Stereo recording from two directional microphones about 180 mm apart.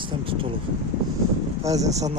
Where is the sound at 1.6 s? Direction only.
20° right (ahead or behind).